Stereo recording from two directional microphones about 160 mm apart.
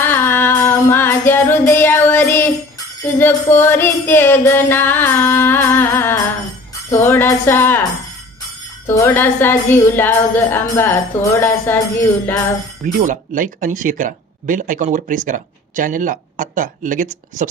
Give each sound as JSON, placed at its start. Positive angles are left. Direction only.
{"t": 0.0, "sound": "female singing", "side_deg": 15}
{"t": 1.3, "sound": "music", "side_deg": 15}
{"t": 3.6, "sound": "speech", "side_deg": 15}
{"t": 8.9, "sound": "speech", "side_deg": 15}
{"t": 12.8, "sound": "speech", "side_deg": -55}